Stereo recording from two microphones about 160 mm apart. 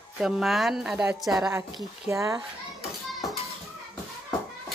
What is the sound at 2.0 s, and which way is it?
Speech, 20° right (ahead or behind).